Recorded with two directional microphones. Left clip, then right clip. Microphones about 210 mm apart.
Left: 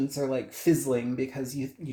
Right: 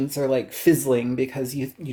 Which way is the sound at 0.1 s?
40° right (ahead or behind).